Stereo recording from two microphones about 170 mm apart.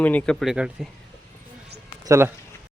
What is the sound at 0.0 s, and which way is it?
Speech, 10° left (ahead or behind).